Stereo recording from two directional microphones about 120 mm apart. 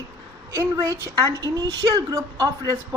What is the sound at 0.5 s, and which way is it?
A woman's voice, 25° right (ahead or behind).